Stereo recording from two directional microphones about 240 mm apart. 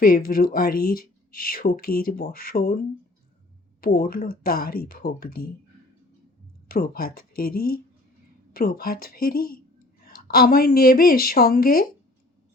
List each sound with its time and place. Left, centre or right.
0.5 s speech: left
6.7 s speech: left